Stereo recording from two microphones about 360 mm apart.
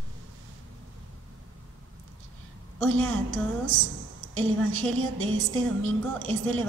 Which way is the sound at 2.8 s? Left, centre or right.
Right.